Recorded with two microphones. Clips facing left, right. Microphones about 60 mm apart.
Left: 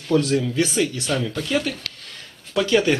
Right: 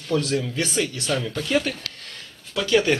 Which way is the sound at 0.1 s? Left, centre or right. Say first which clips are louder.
Left 4 dB; left.